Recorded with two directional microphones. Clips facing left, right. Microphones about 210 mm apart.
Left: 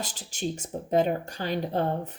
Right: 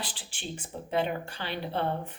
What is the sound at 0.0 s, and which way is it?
Speech, 45° left (ahead or behind).